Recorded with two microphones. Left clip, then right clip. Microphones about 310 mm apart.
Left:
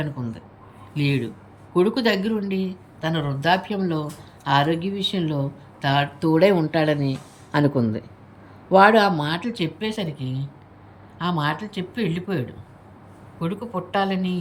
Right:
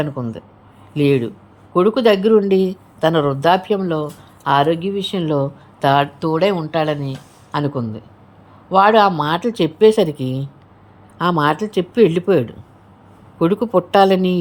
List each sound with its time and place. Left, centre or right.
0.9 s speech: centre
13.9 s speech: centre